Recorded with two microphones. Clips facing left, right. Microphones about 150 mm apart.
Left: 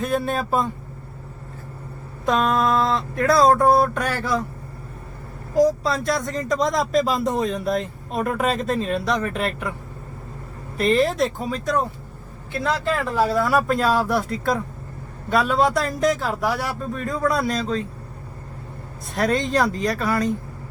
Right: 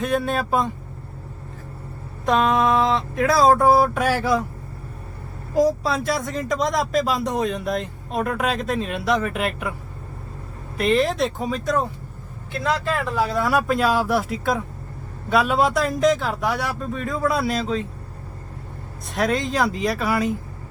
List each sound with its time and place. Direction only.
0.0 s speech: centre (ahead or behind)
2.2 s speech: centre (ahead or behind)
5.6 s speech: 5° right (ahead or behind)
10.8 s speech: centre (ahead or behind)
13.3 s speech: centre (ahead or behind)
19.0 s speech: centre (ahead or behind)